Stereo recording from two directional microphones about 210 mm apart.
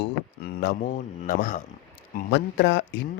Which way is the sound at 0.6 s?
45° left (ahead or behind).